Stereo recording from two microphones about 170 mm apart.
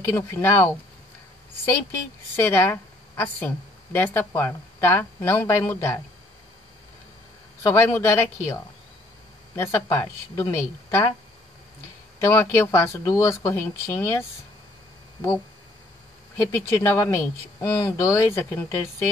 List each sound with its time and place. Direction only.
0.1 s speech: 15° left (ahead or behind)
1.9 s a woman's voice: 15° left (ahead or behind)
7.6 s speech: 15° left (ahead or behind)
9.6 s speech: 15° left (ahead or behind)
12.2 s speech: 15° left (ahead or behind)
16.3 s speech: 15° left (ahead or behind)